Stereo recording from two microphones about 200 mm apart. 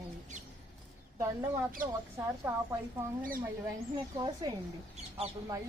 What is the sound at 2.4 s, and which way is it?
Speech, 15° right (ahead or behind).